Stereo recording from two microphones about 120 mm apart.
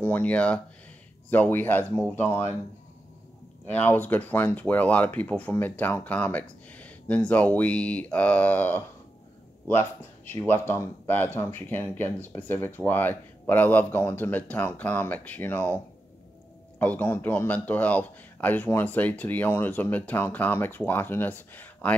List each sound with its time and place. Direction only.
0.0 s speech: 15° left (ahead or behind)
3.6 s speech: 15° left (ahead or behind)